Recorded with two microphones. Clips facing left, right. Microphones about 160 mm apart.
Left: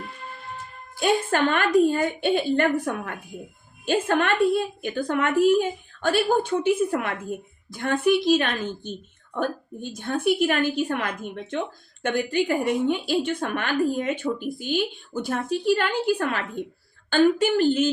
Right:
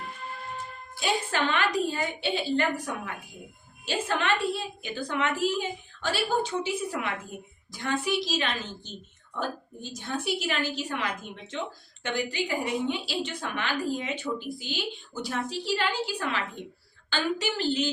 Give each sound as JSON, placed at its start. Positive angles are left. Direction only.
{"t": 0.9, "sound": "a woman's voice", "side_deg": 50}